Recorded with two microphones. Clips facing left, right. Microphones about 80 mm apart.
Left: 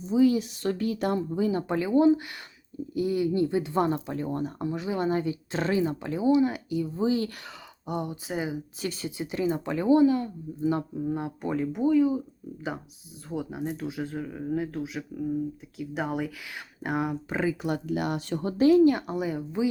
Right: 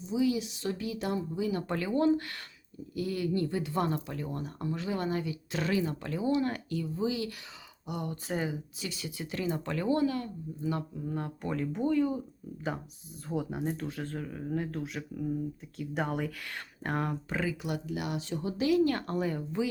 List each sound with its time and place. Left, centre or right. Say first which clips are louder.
0.0 s speech: left 7 dB; left
1.6 s speech: left 6 dB; centre
8.1 s speech: left 2 dB; centre
8.8 s speech: left 7 dB; left
9.0 s speech: left 5 dB; left
13.2 s speech: left 1 dB; centre
17.8 s speech: left 6 dB; left
18.9 s speech: left 5 dB; centre